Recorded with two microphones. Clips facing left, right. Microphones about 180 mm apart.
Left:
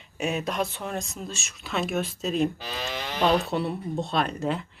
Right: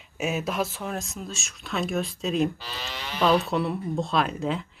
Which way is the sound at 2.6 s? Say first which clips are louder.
Left 4 dB; 55° left (ahead or behind).